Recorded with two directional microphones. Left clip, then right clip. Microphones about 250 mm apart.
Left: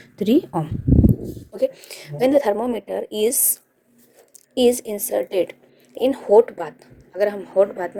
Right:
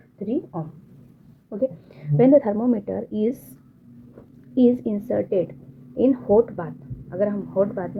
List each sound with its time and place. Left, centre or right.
0.2 s speech: left
1.5 s a woman's voice: left
4.5 s a woman's voice: centre